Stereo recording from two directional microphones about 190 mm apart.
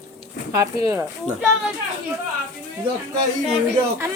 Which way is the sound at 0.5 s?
15° right (ahead or behind).